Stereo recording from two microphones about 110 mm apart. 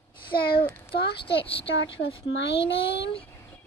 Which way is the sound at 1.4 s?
55° left (ahead or behind).